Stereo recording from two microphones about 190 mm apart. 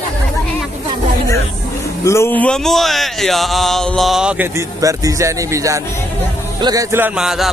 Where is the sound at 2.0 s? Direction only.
15° left (ahead or behind); by 4.5 s 5° right (ahead or behind).